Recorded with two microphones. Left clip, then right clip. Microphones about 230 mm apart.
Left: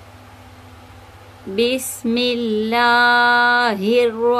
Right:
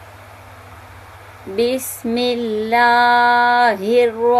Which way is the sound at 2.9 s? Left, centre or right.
Left.